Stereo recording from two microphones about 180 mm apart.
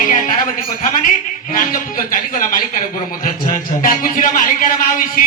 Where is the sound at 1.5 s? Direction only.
50° left (ahead or behind).